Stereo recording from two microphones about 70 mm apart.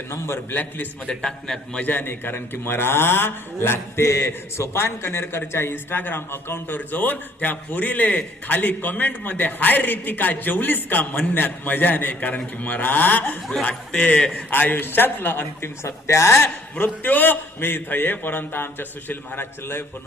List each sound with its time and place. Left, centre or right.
0.5 s a man's voice: left
1.0 s a man's voice: centre
1.8 s a man's voice: left
14.5 s a man's voice: left
15.8 s a man's voice: left